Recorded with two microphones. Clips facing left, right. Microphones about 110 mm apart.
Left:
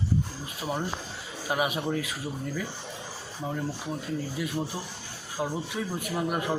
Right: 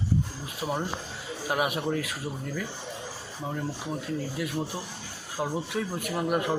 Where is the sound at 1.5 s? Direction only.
Centre (ahead or behind).